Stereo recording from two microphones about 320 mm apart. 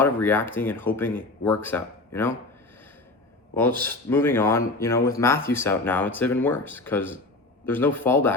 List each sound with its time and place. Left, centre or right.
0.0 s speech: centre
3.5 s speech: centre